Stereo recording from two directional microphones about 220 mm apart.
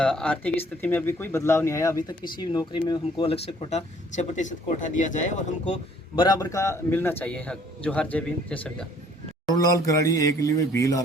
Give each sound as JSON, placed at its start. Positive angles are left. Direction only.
{"t": 0.0, "sound": "speech", "side_deg": 5}
{"t": 6.1, "sound": "a man's voice", "side_deg": 20}